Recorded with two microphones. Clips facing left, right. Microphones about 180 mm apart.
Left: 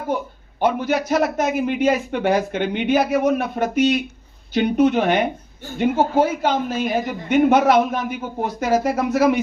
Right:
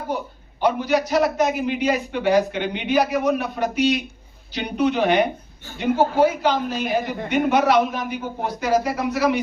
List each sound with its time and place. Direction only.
0.6 s a man's voice: 50° left (ahead or behind)
6.2 s speech: 50° left (ahead or behind)